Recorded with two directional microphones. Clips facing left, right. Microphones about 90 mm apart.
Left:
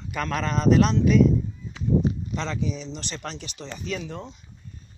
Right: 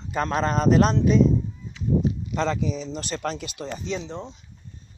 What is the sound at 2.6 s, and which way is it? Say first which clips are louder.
Speech: right 3 dB; 40° right (ahead or behind).